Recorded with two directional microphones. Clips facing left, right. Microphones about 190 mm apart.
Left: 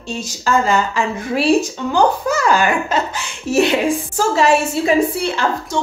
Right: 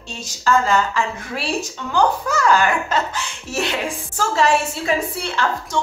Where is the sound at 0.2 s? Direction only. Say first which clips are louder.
Left 1 dB; 10° left (ahead or behind).